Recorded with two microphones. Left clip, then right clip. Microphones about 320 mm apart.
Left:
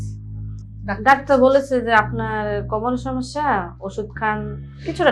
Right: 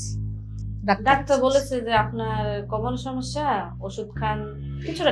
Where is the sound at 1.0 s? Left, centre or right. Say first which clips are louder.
Left 7 dB; left.